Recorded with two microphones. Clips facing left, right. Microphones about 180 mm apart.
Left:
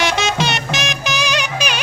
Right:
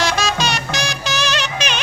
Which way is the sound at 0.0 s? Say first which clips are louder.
Left 1 dB; 20° left (ahead or behind).